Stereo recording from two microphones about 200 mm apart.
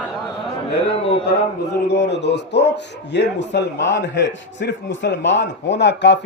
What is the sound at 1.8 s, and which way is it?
A man's voice, 60° left (ahead or behind).